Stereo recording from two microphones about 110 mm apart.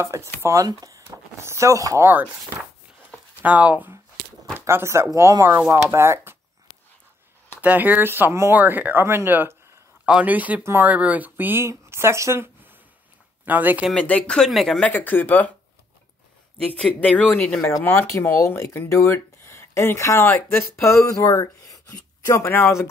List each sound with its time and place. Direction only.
0.0 s speech: 25° right (ahead or behind)
3.4 s speech: 15° right (ahead or behind)
7.6 s speech: 15° right (ahead or behind)
14.0 s speech: 10° left (ahead or behind)
14.8 s speech: 15° left (ahead or behind)
16.7 s speech: 10° left (ahead or behind)
17.6 s speech: 20° left (ahead or behind)